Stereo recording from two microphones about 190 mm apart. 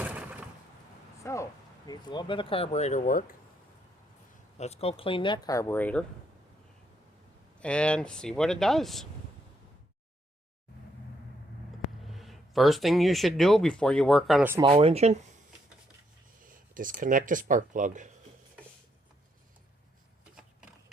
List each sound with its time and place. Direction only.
0.0 s a sound: 10° right (ahead or behind)
1.2 s a sound: 15° left (ahead or behind)
1.9 s speech: 25° left (ahead or behind); by 3.3 s 45° left (ahead or behind)
4.5 s speech: 35° left (ahead or behind); by 6.1 s 10° left (ahead or behind)
7.6 s speech: 5° left (ahead or behind)
12.0 s speech: centre (ahead or behind)
14.6 s speech: 30° right (ahead or behind)
16.4 s speech: 45° right (ahead or behind)